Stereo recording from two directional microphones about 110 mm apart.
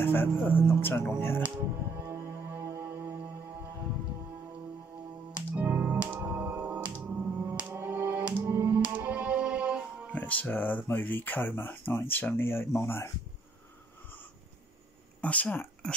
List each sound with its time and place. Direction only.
0.0 s speech: 20° left (ahead or behind)
1.9 s music: 20° right (ahead or behind)
5.3 s music: 10° right (ahead or behind)
10.1 s speech: 15° left (ahead or behind)
15.2 s speech: 15° left (ahead or behind)